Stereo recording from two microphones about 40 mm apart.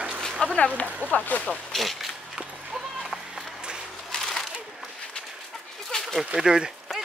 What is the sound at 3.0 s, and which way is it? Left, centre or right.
Run, centre.